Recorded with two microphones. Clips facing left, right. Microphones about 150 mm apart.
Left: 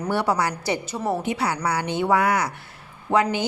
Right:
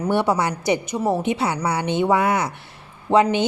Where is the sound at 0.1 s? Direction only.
20° right (ahead or behind).